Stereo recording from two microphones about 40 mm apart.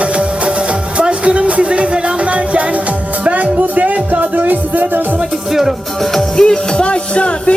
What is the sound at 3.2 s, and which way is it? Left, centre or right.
Music, right.